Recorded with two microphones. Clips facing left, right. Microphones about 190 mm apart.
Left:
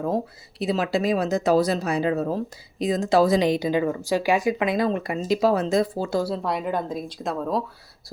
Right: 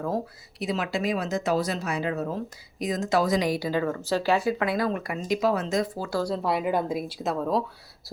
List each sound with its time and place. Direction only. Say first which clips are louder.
0.6 s speech: left 4 dB; 35° left (ahead or behind)
6.2 s speech: even; centre (ahead or behind)